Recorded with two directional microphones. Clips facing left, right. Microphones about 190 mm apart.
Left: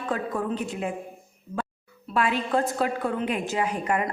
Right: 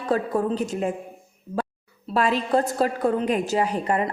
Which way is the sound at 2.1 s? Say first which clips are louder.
Right 3 dB; 35° right (ahead or behind).